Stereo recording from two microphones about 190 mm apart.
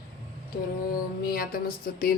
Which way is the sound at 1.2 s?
50° left (ahead or behind).